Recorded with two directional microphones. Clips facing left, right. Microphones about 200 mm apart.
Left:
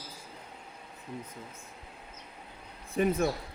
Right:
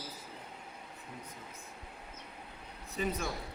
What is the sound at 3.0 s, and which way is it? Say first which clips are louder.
Speech: left 8 dB; 50° left (ahead or behind).